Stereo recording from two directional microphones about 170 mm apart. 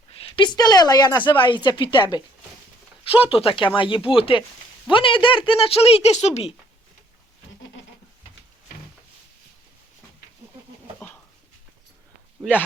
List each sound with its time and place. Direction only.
0.1 s a woman's voice: 30° left (ahead or behind)